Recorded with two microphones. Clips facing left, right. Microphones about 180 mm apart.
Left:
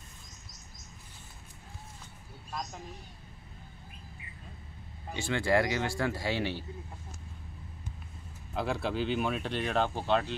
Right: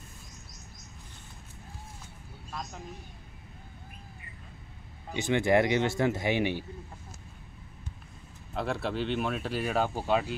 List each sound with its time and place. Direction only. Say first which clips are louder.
5.1 s speech: right 3 dB; 20° right (ahead or behind)
8.5 s speech: even; centre (ahead or behind)